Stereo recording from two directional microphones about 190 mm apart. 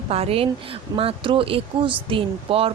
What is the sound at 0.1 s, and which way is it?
Speech, 30° right (ahead or behind).